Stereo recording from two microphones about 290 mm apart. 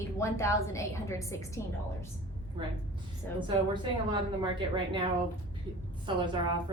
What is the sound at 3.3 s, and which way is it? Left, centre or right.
Speech, centre.